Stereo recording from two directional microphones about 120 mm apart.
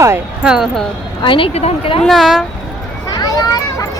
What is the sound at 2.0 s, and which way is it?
Speech, centre (ahead or behind).